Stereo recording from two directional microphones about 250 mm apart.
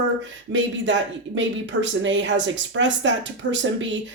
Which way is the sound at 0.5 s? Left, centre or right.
Right.